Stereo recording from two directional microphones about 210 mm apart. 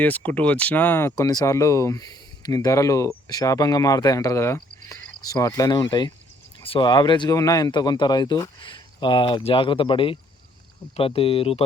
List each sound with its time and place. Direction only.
0.0 s speech: 10° left (ahead or behind); by 11.6 s 25° left (ahead or behind)